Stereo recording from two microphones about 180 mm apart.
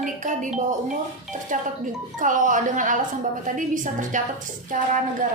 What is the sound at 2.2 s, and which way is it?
A woman's voice, 45° right (ahead or behind).